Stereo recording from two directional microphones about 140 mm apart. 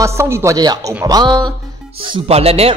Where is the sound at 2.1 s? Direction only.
45° right (ahead or behind).